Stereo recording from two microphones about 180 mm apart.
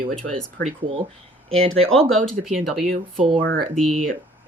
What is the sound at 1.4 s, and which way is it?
Speech, 35° right (ahead or behind).